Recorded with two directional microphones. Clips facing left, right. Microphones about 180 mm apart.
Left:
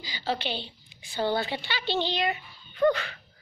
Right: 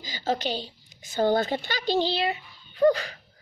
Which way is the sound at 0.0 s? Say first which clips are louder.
Right 3 dB; 45° right (ahead or behind).